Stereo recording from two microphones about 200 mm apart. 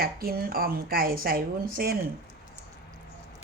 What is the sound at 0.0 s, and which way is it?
A woman's voice, 50° right (ahead or behind).